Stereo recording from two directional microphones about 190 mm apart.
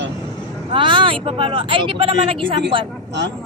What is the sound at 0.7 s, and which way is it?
Speech, 25° right (ahead or behind).